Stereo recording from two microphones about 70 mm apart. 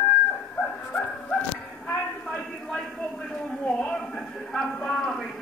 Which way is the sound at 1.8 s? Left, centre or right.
Left.